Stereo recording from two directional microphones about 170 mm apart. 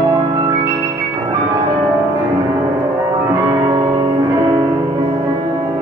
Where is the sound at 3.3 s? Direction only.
15° right (ahead or behind).